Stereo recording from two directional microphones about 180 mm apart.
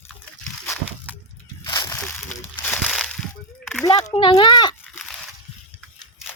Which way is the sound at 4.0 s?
35° left (ahead or behind).